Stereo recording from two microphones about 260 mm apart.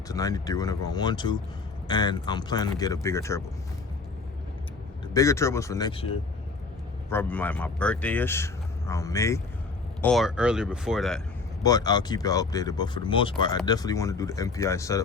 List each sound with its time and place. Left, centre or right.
0.1 s speech: centre
5.1 s speech: centre
7.1 s speech: centre
10.0 s speech: centre
11.6 s speech: centre